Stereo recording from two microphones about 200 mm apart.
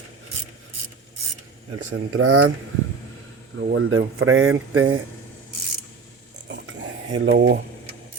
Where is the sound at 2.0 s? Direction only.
90° right.